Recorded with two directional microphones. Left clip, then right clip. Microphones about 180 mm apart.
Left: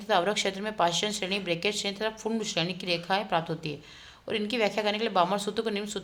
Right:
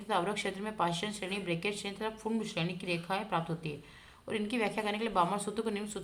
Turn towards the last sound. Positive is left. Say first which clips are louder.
# left 5 dB
turn(degrees=20)  # may be behind; listen again after turning